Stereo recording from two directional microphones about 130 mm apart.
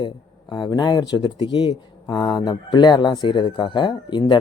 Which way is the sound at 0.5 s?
30° left (ahead or behind).